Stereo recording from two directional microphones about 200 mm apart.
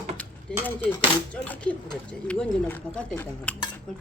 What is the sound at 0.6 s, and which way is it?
Speech, 10° left (ahead or behind).